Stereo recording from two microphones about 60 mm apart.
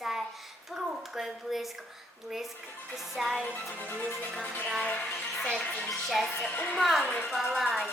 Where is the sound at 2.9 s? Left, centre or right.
Centre.